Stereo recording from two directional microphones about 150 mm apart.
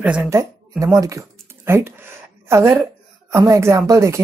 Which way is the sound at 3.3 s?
20° right (ahead or behind).